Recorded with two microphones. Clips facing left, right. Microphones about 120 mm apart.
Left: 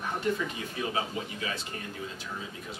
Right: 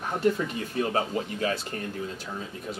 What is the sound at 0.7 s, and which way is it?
Speech, 50° right (ahead or behind).